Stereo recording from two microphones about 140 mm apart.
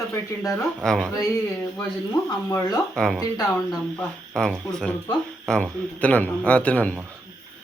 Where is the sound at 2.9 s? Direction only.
5° left (ahead or behind).